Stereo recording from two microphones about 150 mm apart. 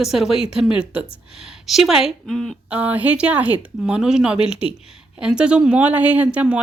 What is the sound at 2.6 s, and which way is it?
A woman's voice, 10° right (ahead or behind).